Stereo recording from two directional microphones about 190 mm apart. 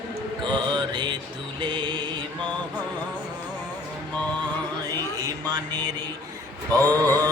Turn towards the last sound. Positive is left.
turn(degrees=-20)  # may be behind; listen again after turning